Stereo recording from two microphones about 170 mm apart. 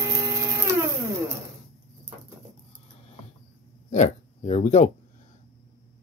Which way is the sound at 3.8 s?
45° left (ahead or behind).